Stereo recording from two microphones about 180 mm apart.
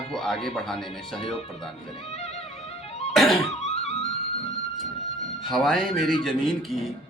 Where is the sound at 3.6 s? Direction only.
35° left (ahead or behind).